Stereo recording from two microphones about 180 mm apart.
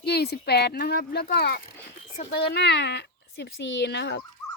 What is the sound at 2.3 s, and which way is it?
Speech, 70° left (ahead or behind).